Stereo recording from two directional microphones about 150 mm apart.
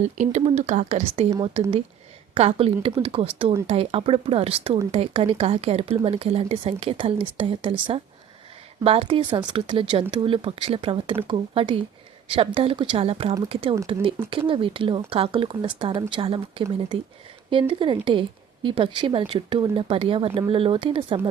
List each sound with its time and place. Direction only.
0.0 s speech: 50° right (ahead or behind)
2.3 s speech: 40° right (ahead or behind)